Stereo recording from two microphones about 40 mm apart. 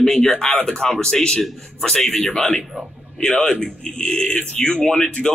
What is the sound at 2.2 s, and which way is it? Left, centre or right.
Speech, centre.